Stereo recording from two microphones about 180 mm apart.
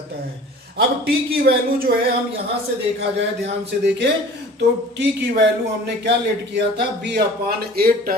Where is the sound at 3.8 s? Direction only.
75° right (ahead or behind).